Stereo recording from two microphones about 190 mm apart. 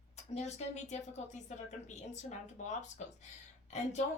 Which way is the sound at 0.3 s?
35° left (ahead or behind).